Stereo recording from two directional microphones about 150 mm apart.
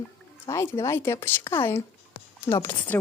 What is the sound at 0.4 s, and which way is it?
Speech, 20° left (ahead or behind).